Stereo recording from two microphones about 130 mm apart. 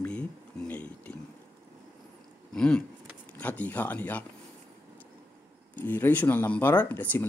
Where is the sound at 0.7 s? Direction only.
10° left (ahead or behind).